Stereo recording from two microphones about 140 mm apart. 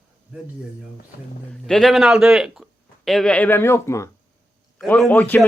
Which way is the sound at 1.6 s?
Centre (ahead or behind).